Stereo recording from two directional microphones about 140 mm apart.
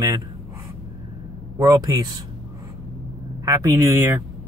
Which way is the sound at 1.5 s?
25° right (ahead or behind).